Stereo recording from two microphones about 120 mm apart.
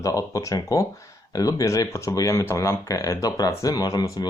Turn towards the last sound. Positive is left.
turn(degrees=30)  # may be behind; listen again after turning